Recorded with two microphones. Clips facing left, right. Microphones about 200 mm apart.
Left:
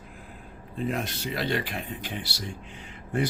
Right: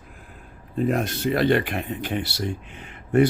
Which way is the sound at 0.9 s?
50° right (ahead or behind).